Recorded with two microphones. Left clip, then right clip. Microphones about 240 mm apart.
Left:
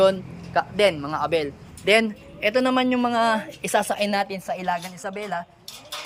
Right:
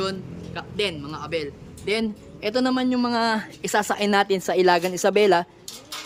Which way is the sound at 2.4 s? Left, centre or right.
Centre.